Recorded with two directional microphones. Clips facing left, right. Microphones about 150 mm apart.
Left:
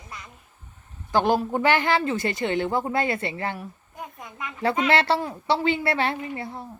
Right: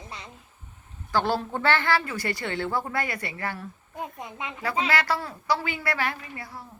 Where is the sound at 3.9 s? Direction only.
25° right (ahead or behind).